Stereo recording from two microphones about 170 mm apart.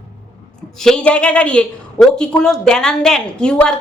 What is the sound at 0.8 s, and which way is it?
A woman's voice, 5° left (ahead or behind).